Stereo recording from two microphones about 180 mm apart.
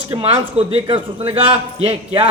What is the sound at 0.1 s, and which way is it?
A man's voice, 30° right (ahead or behind).